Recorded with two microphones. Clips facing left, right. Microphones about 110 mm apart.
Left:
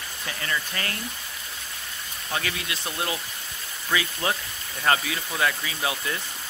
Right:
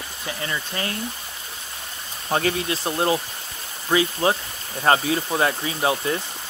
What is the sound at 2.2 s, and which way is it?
Speech, 35° right (ahead or behind).